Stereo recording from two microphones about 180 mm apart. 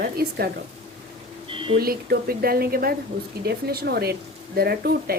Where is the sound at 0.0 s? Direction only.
60° right (ahead or behind).